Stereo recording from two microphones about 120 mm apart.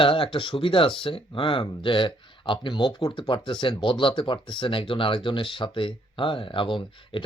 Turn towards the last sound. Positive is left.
turn(degrees=45)  # may be behind; listen again after turning